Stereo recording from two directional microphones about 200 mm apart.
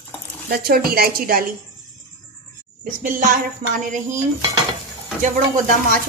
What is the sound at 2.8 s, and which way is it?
Speech, 45° right (ahead or behind).